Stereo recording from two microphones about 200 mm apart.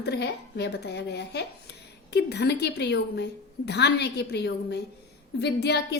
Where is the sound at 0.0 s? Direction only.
55° left (ahead or behind).